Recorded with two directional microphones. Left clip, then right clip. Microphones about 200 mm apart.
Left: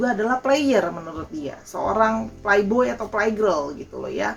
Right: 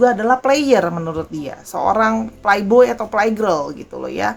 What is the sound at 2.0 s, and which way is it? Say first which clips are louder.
A woman's voice: right 3 dB; 50° right (ahead or behind).